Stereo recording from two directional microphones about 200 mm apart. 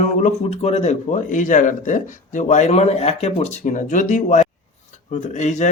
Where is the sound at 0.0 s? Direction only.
35° left (ahead or behind).